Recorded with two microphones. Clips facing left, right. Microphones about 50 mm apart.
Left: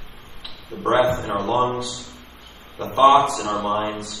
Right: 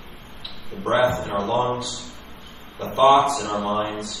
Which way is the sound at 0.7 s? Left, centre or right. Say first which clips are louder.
Left 1 dB; left.